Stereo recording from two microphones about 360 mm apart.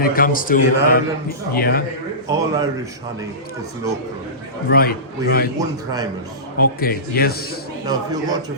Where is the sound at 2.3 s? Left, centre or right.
Centre.